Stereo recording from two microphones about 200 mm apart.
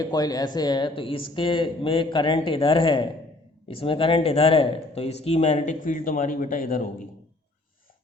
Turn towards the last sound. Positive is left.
turn(degrees=45)  # may be behind; listen again after turning